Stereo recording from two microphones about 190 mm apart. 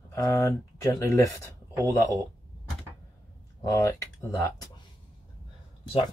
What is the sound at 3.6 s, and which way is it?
Speech, 15° left (ahead or behind).